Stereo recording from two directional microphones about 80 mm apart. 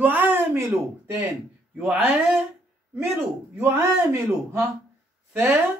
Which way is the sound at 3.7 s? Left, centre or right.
Right.